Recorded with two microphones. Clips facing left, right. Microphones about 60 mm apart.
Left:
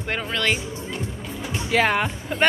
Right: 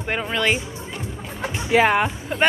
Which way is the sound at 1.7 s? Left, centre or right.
Centre.